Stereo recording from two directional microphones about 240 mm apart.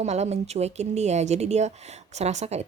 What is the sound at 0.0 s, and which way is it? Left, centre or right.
A woman's voice, right.